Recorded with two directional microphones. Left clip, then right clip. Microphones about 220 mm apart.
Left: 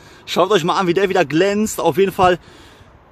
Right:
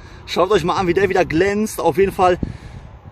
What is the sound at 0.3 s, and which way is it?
Speech, 20° left (ahead or behind).